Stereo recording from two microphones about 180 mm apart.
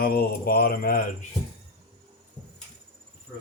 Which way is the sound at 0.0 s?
55° left (ahead or behind).